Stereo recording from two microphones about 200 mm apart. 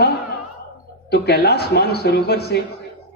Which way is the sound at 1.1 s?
55° left (ahead or behind).